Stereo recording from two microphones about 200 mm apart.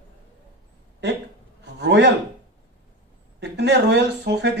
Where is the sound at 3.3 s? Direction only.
60° right (ahead or behind).